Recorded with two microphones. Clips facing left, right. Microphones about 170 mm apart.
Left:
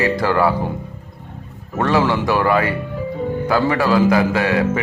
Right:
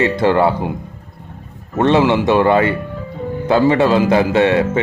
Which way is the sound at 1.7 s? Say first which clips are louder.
Right 4 dB; 25° right (ahead or behind).